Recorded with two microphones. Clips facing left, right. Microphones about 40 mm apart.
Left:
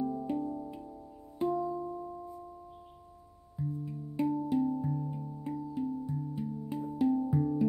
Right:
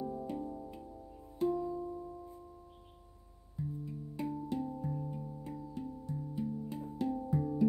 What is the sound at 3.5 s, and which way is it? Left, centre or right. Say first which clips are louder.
Music: left 4 dB; centre.